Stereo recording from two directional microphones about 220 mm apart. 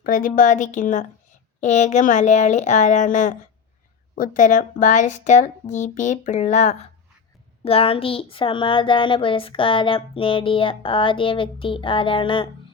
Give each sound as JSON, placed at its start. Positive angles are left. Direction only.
{"t": 0.0, "sound": "speech", "side_deg": 40}